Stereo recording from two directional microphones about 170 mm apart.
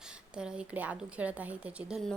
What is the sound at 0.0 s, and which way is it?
A woman's voice, 5° right (ahead or behind).